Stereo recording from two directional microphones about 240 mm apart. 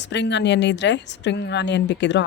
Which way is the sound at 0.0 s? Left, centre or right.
Left.